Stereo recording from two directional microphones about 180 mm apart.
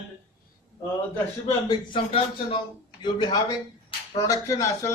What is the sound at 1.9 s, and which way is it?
A man's voice, 30° left (ahead or behind).